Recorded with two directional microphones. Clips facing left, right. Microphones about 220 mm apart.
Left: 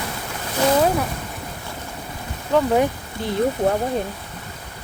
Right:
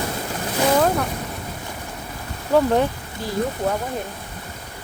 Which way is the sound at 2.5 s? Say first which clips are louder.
Right 1 dB; 10° right (ahead or behind).